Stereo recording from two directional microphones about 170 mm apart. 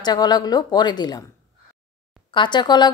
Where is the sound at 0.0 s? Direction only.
25° left (ahead or behind).